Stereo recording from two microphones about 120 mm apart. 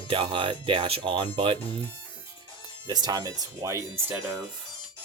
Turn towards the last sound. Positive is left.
turn(degrees=-20)  # may be behind; listen again after turning